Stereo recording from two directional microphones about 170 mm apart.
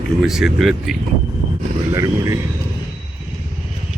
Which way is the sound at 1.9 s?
20° right (ahead or behind).